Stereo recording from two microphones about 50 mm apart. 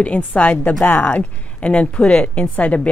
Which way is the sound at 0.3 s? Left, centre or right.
Left.